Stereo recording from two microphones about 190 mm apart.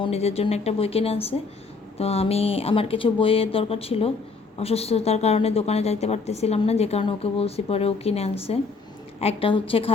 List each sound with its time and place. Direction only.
0.0 s a woman's voice: 35° left (ahead or behind)